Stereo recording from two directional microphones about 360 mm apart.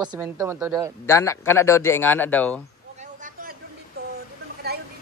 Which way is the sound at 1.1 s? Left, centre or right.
Centre.